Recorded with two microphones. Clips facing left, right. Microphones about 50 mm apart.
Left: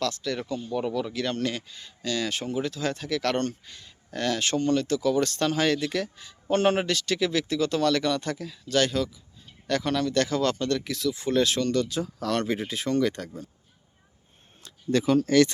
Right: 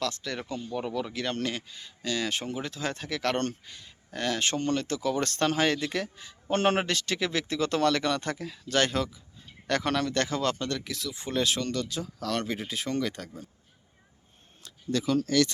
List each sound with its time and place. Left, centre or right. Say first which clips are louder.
0.1 s speech: left 4 dB; right
0.7 s speech: left 4 dB; centre
1.1 s speech: left 3 dB; right
3.3 s a man's voice: left 2 dB; right
3.7 s speech: left 2 dB; centre
4.4 s a man's voice: left 4 dB; right
10.2 s speech: left 3 dB; right
10.8 s speech: left 7 dB; centre
11.1 s speech: left 4 dB; centre
11.7 s speech: left 6 dB; centre
14.6 s speech: left 5 dB; left